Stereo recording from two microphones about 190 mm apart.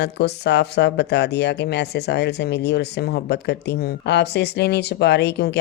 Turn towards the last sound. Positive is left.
turn(degrees=60)  # may be behind; listen again after turning